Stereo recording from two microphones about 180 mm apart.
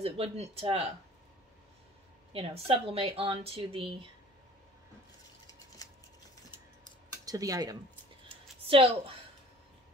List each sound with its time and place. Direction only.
0.0 s speech: 35° right (ahead or behind)
2.3 s speech: 30° right (ahead or behind)
7.2 s cutlery: 20° right (ahead or behind)
8.6 s speech: 30° right (ahead or behind)